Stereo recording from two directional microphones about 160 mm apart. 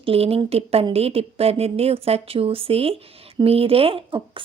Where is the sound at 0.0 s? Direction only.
35° right (ahead or behind).